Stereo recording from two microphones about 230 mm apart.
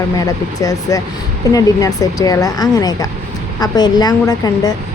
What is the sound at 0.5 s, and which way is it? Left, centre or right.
A woman's voice, centre.